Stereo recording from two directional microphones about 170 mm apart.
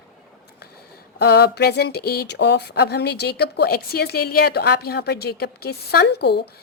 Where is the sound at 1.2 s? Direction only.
70° left (ahead or behind).